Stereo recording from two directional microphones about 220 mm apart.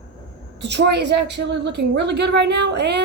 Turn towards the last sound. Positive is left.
turn(degrees=-50)  # may be behind; listen again after turning